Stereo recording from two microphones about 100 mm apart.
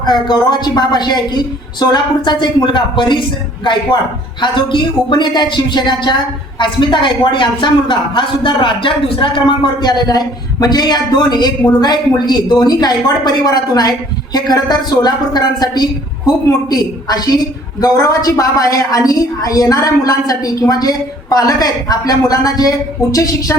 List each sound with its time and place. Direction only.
0.0 s a woman's voice: 45° left (ahead or behind)